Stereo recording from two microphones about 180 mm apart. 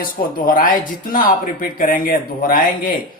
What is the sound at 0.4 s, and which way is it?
Speech, 50° left (ahead or behind).